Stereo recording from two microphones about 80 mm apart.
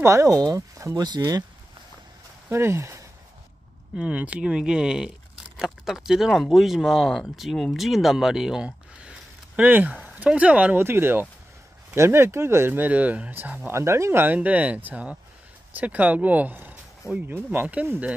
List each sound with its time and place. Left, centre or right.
0.0 s speech: right
0.9 s speech: right
2.5 s speech: right
3.9 s speech: centre
9.6 s speech: centre
13.7 s speech: right
14.2 s speech: centre